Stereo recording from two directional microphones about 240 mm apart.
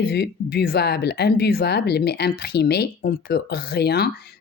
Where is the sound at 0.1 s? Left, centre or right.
Left.